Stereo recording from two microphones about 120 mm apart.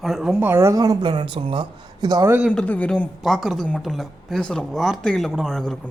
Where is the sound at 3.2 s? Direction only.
Centre (ahead or behind).